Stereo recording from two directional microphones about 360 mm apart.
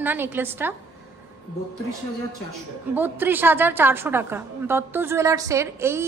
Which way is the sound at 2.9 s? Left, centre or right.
Centre.